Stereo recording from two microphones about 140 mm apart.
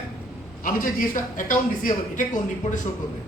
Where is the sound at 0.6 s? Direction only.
80° left; by 2.8 s 65° left (ahead or behind).